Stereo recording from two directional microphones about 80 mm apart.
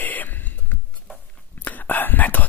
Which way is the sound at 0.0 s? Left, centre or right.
Left.